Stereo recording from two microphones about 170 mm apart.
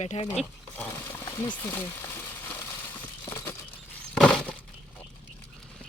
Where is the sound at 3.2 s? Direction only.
15° left (ahead or behind).